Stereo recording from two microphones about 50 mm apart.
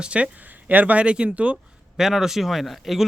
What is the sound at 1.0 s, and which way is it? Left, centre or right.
Speech, right.